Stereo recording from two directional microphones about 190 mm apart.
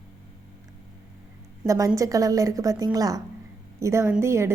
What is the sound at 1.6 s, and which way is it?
A woman's voice, 20° right (ahead or behind).